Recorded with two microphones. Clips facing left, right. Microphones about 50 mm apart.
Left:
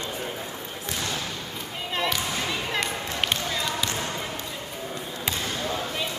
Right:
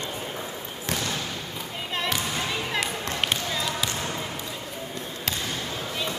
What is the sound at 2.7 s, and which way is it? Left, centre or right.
Basketball bounce, centre.